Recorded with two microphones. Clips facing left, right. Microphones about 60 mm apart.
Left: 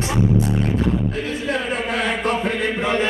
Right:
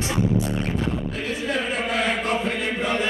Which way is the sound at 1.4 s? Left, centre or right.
Left.